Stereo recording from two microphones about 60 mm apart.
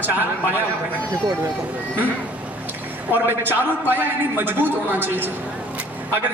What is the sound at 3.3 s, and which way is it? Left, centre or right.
A man's voice, right.